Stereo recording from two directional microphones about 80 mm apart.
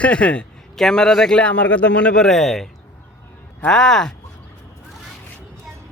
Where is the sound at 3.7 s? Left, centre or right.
Centre.